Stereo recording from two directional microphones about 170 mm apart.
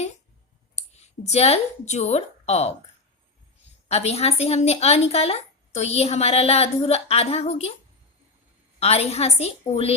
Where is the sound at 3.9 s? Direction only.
40° left (ahead or behind).